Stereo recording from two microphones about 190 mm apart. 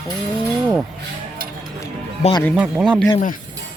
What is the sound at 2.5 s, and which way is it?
Speech, 5° right (ahead or behind).